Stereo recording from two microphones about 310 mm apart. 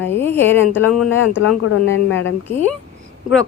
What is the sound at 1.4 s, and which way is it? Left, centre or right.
Speech, left.